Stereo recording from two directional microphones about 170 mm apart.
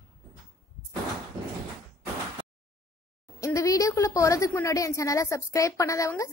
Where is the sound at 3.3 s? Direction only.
20° left (ahead or behind).